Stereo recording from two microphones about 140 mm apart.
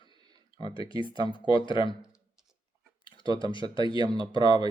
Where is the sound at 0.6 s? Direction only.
40° left (ahead or behind).